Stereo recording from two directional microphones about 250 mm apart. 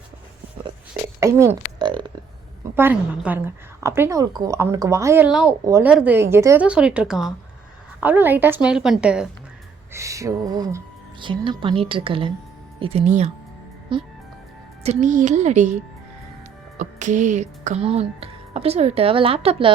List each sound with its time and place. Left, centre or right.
1.2 s a woman's voice: centre
2.7 s a woman's voice: centre